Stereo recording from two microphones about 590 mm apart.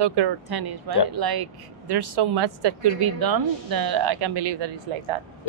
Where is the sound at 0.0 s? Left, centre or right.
Right.